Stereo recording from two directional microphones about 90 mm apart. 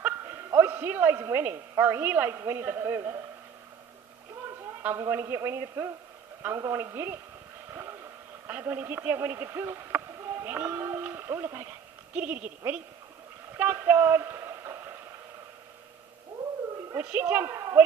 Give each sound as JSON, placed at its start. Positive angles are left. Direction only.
{"t": 0.0, "sound": "speech", "side_deg": -25}
{"t": 4.9, "sound": "a man's voice", "side_deg": -30}
{"t": 8.5, "sound": "speech", "side_deg": -20}
{"t": 10.4, "sound": "a sound", "side_deg": -20}
{"t": 12.2, "sound": "a woman's voice", "side_deg": -15}
{"t": 16.9, "sound": "a woman's voice", "side_deg": -25}